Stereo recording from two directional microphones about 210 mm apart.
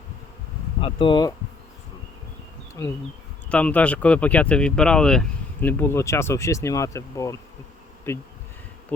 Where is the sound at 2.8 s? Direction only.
10° left (ahead or behind).